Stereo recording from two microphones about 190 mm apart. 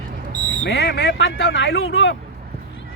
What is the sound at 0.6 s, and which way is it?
Speech, 60° left (ahead or behind).